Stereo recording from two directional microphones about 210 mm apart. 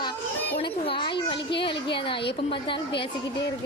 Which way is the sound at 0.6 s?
25° left (ahead or behind).